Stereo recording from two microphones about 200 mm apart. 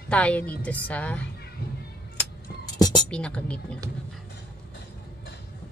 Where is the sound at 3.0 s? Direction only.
5° left (ahead or behind).